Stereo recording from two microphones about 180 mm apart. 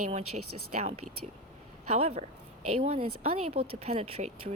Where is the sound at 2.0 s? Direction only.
35° right (ahead or behind).